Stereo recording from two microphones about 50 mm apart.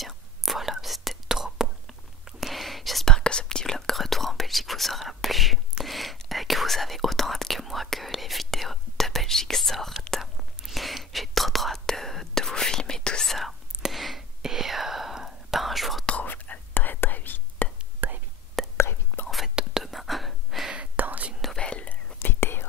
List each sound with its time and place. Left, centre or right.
0.0 s whispering: centre
3.2 s whispering: centre
13.3 s whispering: centre
16.3 s whispering: left
18.0 s whispering: right
18.8 s whispering: left
19.8 s whispering: centre
20.7 s whispering: right
21.5 s whispering: left
22.2 s whispering: left